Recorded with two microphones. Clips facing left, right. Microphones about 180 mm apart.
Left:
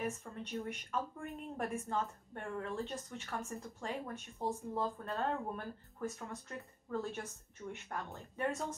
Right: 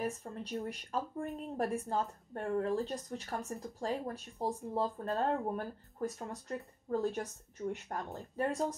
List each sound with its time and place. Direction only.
0.0 s a woman's voice: 35° right (ahead or behind)